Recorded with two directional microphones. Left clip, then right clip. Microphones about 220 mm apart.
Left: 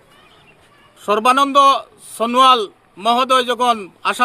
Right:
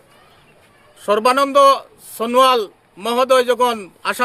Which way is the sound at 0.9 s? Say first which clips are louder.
Left 1 dB; centre (ahead or behind).